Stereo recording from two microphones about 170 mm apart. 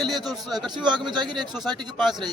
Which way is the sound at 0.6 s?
25° right (ahead or behind).